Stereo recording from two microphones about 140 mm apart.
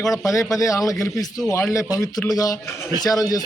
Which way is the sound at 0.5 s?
25° left (ahead or behind).